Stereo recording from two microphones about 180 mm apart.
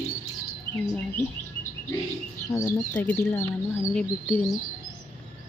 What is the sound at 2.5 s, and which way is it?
Speech, 10° left (ahead or behind).